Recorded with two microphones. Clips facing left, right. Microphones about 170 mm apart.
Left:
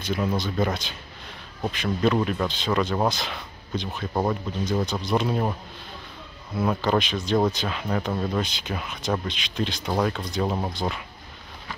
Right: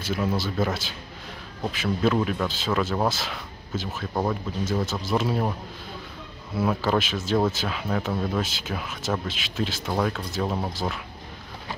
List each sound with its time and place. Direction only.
0.0 s speech: 5° right (ahead or behind)
4.1 s speech: 5° left (ahead or behind)
4.6 s speech: 5° right (ahead or behind)
6.5 s speech: 5° right (ahead or behind)